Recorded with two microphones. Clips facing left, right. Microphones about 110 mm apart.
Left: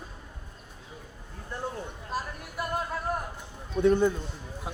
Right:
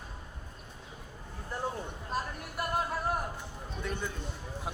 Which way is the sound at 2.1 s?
5° left (ahead or behind).